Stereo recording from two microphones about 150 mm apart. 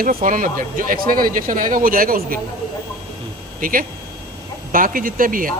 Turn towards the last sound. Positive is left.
turn(degrees=-65)  # may be behind; listen again after turning